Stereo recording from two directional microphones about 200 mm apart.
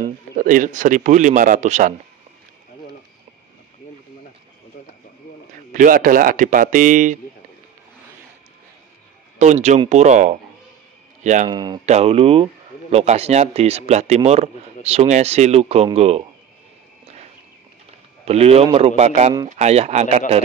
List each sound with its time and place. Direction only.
0.0 s speech: 40° right (ahead or behind)
4.7 s bird: 50° left (ahead or behind)
5.7 s speech: 40° right (ahead or behind)
9.4 s speech: 35° right (ahead or behind)
11.5 s speech: 20° right (ahead or behind)
11.8 s speech: 30° right (ahead or behind)
17.0 s a sound: 35° right (ahead or behind)
18.2 s speech: 30° right (ahead or behind)